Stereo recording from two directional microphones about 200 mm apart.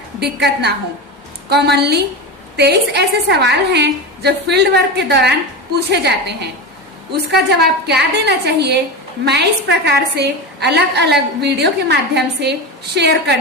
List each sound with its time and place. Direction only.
0.2 s a woman's voice: 55° right (ahead or behind)